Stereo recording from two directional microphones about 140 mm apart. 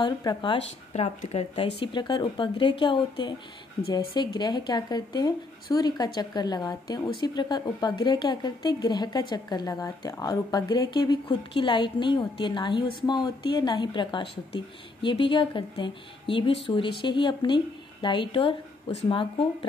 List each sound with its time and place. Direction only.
0.0 s a woman's voice: 30° left (ahead or behind)
0.9 s a woman's voice: 50° left (ahead or behind)